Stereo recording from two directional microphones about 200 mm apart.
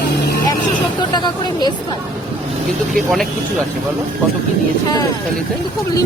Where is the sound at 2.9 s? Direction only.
Centre (ahead or behind).